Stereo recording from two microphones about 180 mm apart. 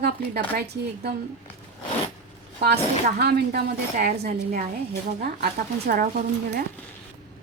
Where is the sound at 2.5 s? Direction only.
60° right (ahead or behind).